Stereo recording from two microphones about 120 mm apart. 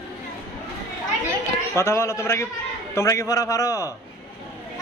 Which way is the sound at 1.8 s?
25° left (ahead or behind).